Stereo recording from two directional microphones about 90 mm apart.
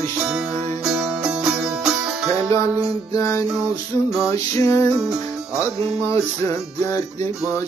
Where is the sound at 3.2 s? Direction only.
40° left (ahead or behind).